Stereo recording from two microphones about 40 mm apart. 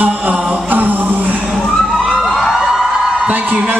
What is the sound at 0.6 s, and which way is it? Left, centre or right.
Music, right.